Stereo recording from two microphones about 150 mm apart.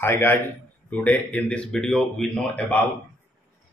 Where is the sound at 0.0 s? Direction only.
15° left (ahead or behind).